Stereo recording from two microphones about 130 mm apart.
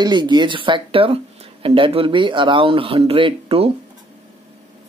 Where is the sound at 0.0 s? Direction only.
35° right (ahead or behind).